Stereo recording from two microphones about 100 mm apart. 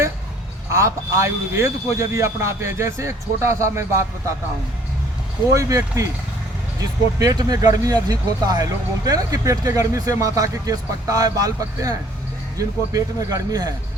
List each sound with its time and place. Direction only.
0.7 s speech: 30° right (ahead or behind)
5.5 s speech: 35° right (ahead or behind)